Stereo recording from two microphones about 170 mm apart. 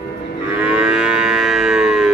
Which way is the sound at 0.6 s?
5° right (ahead or behind).